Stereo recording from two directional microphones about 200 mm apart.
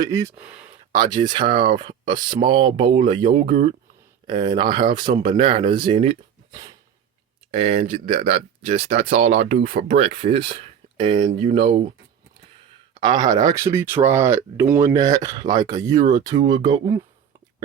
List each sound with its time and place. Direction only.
0.0 s speech: 15° right (ahead or behind)
0.9 s speech: 20° right (ahead or behind)
6.5 s a sound: 15° right (ahead or behind)
7.5 s speech: 30° right (ahead or behind)
12.9 s speech: 25° right (ahead or behind)